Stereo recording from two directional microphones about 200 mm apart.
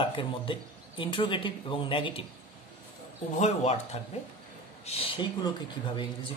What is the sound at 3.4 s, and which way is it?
Speech, 35° left (ahead or behind).